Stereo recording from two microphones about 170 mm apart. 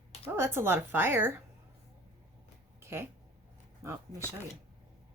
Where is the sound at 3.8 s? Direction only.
15° right (ahead or behind).